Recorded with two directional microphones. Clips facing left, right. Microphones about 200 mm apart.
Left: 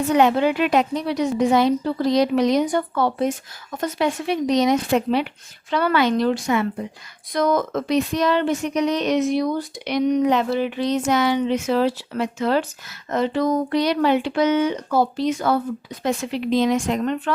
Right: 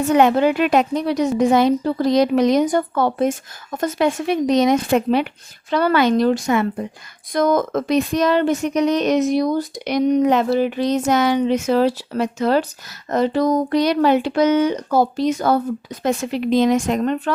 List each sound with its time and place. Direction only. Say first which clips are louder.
0.1 s speech: right 3 dB; 50° right (ahead or behind)